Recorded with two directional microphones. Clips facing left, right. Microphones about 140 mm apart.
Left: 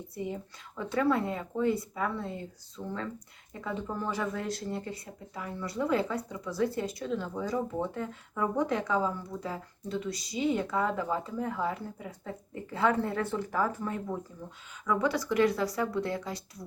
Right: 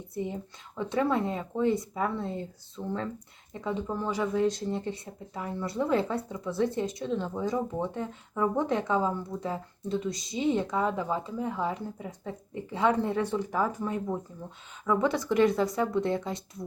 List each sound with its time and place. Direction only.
0.8 s speech: 20° right (ahead or behind)